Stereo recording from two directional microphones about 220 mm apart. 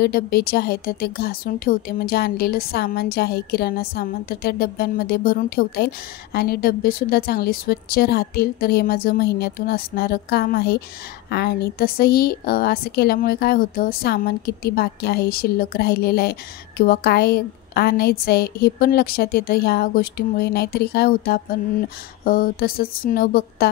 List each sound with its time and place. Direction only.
0.0 s a woman's voice: 45° left (ahead or behind)